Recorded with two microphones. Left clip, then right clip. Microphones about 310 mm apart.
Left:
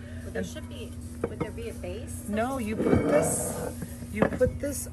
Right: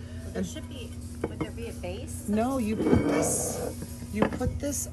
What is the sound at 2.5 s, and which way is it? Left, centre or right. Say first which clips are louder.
Speech: even; centre.